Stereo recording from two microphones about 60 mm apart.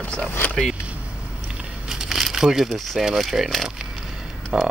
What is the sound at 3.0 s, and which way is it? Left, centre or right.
Speech, centre.